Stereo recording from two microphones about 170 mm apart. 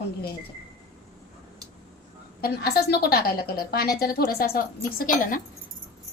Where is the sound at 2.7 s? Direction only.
70° left (ahead or behind).